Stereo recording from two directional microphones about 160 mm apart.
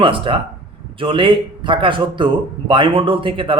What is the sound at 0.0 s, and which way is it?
Speech, 30° right (ahead or behind).